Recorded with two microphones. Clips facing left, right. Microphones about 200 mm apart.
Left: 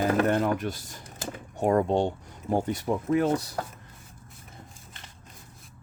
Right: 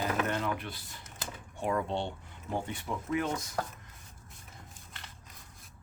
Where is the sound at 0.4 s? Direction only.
45° left (ahead or behind).